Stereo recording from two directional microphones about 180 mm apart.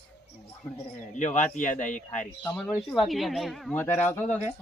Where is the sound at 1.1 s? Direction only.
40° left (ahead or behind).